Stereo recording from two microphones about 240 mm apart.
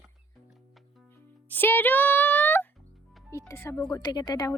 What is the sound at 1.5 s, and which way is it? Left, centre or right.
Speech, centre.